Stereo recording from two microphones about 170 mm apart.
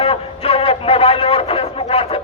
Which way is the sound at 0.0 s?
35° left (ahead or behind).